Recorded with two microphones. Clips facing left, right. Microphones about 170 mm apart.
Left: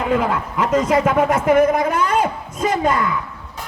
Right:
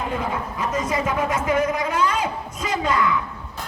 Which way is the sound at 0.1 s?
90° left.